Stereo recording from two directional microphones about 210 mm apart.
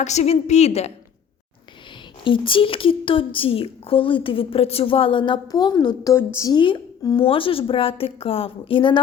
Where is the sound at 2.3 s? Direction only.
25° left (ahead or behind).